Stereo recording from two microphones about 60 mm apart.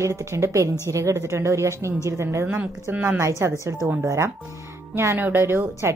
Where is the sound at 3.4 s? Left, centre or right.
Right.